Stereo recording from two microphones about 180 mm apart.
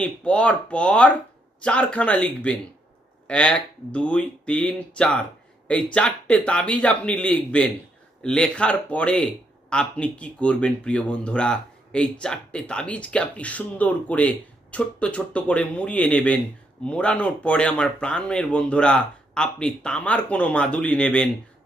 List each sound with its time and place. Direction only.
0.0 s speech: 5° left (ahead or behind)